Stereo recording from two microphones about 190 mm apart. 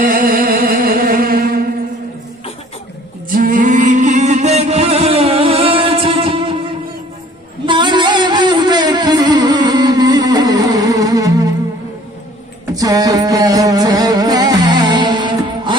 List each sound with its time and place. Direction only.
0.0 s music: 50° right (ahead or behind)
3.2 s chant: 50° right (ahead or behind); by 6.6 s 25° right (ahead or behind)
7.7 s music: 25° right (ahead or behind)
12.7 s music: 20° right (ahead or behind)